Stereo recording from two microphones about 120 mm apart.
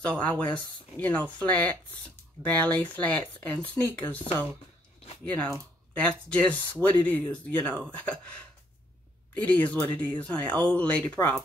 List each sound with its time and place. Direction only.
0.0 s speech: 10° left (ahead or behind)
5.2 s speech: 15° left (ahead or behind)
9.3 s speech: 15° left (ahead or behind)